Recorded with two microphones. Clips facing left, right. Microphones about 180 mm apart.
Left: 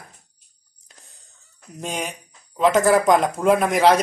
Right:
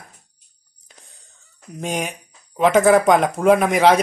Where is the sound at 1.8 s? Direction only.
5° right (ahead or behind).